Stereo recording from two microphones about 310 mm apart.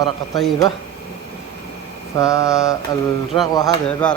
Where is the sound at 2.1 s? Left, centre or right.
Centre.